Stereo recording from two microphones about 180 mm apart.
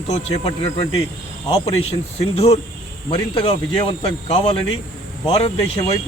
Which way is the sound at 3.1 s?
30° left (ahead or behind).